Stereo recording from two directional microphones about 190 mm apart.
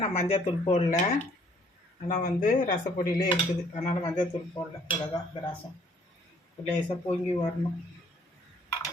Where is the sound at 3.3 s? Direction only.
35° left (ahead or behind).